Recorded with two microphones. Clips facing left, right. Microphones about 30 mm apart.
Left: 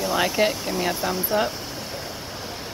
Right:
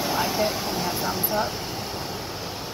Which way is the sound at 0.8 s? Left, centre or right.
Centre.